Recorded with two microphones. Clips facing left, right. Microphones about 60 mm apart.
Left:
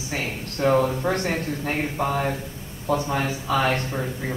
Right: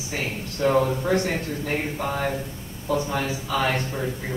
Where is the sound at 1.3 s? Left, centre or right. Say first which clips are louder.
Left 1 dB; left.